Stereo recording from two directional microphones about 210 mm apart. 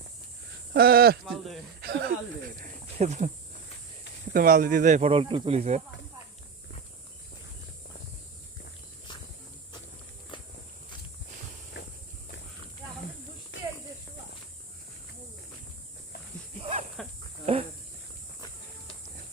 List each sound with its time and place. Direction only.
0.7 s speech: 45° right (ahead or behind)
1.2 s speech: centre (ahead or behind)
1.8 s speech: 50° right (ahead or behind)
3.0 s speech: 30° right (ahead or behind)
4.4 s speech: 40° right (ahead or behind)
10.3 s walk: 25° left (ahead or behind)
11.8 s walk: 60° left (ahead or behind)
13.5 s snake: 60° left (ahead or behind)
16.6 s a sound: 30° right (ahead or behind)